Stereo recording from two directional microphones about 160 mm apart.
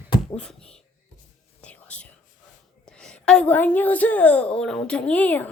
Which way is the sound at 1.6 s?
10° left (ahead or behind).